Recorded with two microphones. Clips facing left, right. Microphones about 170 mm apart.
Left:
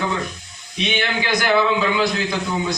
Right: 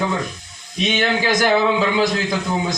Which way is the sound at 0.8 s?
45° right (ahead or behind).